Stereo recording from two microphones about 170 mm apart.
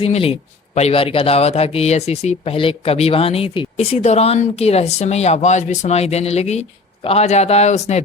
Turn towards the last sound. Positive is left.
turn(degrees=40)  # may be behind; listen again after turning